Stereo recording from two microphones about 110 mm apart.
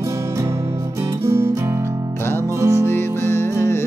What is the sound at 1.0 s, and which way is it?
Music, 30° right (ahead or behind).